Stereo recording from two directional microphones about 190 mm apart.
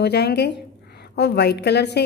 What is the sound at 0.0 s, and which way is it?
A woman's voice, 60° left (ahead or behind).